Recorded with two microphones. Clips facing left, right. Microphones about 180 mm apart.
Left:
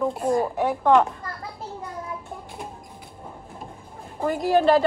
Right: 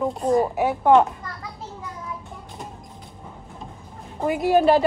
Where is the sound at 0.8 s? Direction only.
20° right (ahead or behind).